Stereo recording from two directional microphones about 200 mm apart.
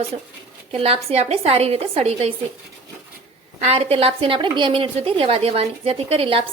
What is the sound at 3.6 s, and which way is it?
A woman's voice, 30° right (ahead or behind).